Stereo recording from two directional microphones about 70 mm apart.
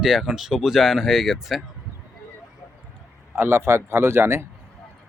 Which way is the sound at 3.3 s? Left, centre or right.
Right.